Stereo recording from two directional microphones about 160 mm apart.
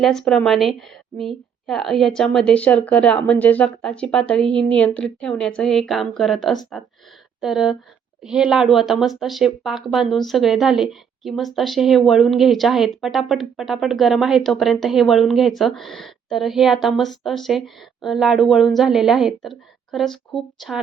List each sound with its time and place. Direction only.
0.0 s speech: 5° left (ahead or behind)